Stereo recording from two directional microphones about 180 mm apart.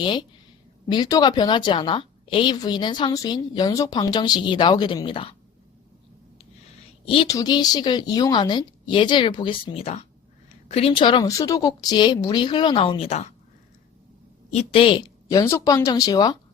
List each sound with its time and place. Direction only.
0.0 s a woman's voice: 25° left (ahead or behind)
7.0 s a woman's voice: 30° left (ahead or behind)
14.5 s a woman's voice: 35° left (ahead or behind)